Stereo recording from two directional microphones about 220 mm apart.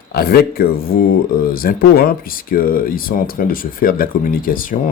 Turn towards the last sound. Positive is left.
turn(degrees=40)  # may be behind; listen again after turning